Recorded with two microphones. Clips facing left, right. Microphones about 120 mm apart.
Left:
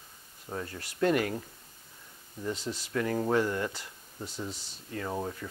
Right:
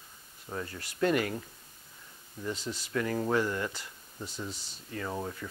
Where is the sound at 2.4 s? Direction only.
30° left (ahead or behind).